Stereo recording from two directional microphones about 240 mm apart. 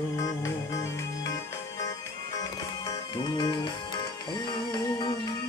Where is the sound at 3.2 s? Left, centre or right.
Centre.